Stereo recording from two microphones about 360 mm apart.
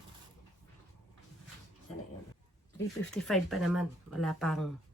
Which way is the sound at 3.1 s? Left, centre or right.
Centre.